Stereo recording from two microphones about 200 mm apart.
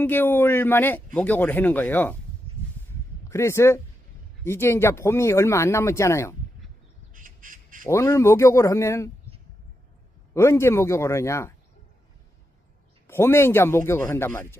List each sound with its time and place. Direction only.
0.0 s a man's voice: 10° left (ahead or behind)
3.2 s a man's voice: 15° left (ahead or behind)
7.1 s squawk: 40° right (ahead or behind)
7.9 s a man's voice: 15° left (ahead or behind)
10.3 s a man's voice: 15° left (ahead or behind)
13.1 s a man's voice: 10° left (ahead or behind)